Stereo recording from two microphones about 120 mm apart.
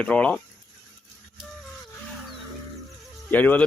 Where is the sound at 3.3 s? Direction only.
15° left (ahead or behind).